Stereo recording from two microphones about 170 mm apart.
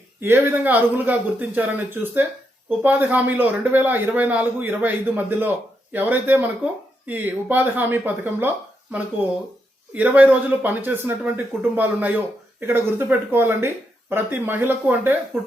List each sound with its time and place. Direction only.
0.2 s speech: 15° right (ahead or behind)